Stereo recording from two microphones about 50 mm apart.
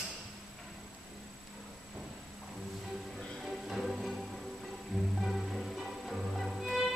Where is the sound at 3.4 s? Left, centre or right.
Centre.